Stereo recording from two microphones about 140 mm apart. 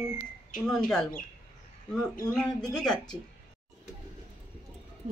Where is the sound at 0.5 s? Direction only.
80° left.